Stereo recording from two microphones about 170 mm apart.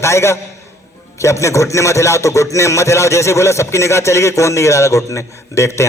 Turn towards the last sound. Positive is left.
turn(degrees=15)  # may be behind; listen again after turning